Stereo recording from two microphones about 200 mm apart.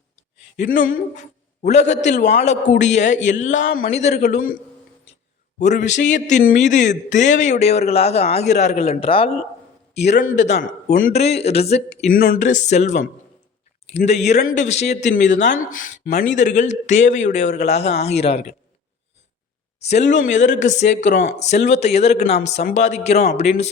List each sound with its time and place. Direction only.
0.5 s a man's voice: 40° left (ahead or behind)
5.5 s a man's voice: 35° left (ahead or behind)
19.8 s a man's voice: 35° left (ahead or behind)